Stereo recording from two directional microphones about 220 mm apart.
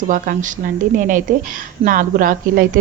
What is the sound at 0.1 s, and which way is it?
A woman's voice, 35° right (ahead or behind).